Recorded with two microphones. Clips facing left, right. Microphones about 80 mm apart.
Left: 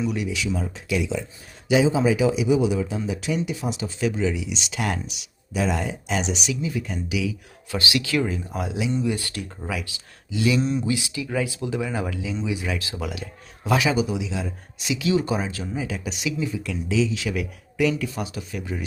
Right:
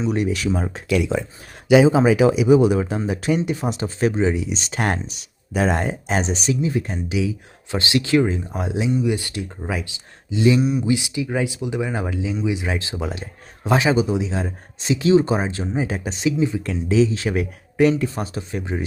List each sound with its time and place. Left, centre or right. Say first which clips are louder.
0.1 s speech: right 5 dB; right
8.9 s speech: right 4 dB; centre
10.6 s speech: right 3 dB; centre
10.8 s speech: right 5 dB; right
16.6 s speech: right 3 dB; right